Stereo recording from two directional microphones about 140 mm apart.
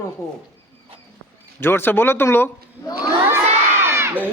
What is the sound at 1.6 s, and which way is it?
A man's voice, 15° left (ahead or behind).